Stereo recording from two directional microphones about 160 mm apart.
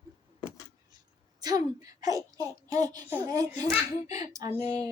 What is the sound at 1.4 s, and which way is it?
A child's voice, 25° right (ahead or behind).